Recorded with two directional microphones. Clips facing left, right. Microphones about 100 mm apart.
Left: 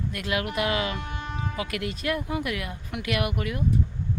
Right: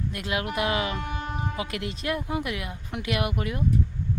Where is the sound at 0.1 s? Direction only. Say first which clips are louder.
Left 1 dB; 25° right (ahead or behind).